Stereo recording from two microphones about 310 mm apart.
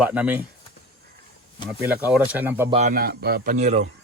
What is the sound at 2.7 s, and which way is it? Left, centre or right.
A man's voice, right.